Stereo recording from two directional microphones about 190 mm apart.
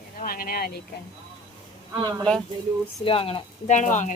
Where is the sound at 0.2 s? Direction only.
50° left (ahead or behind).